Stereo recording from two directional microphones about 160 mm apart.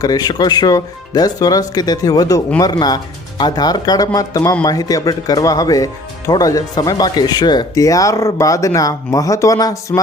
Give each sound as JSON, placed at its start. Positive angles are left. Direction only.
{"t": 0.0, "sound": "speech", "side_deg": 25}